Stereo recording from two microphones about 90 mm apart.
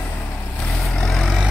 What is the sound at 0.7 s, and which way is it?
Vehicle, 5° left (ahead or behind).